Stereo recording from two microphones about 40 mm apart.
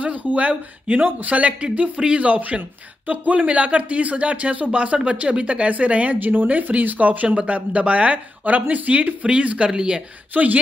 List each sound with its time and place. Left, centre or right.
0.0 s speech: right
6.1 s speech: right
9.8 s a woman's voice: centre
10.3 s speech: right